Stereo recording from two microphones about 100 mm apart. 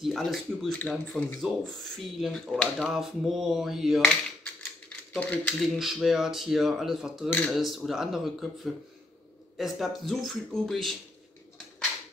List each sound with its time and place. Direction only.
0.0 s speech: centre (ahead or behind)
0.7 s speech: 10° left (ahead or behind)
1.6 s speech: centre (ahead or behind)
4.8 s typewriter: 15° left (ahead or behind)
5.6 s speech: centre (ahead or behind)
7.2 s speech: 15° left (ahead or behind)
7.5 s speech: centre (ahead or behind)
9.6 s speech: centre (ahead or behind)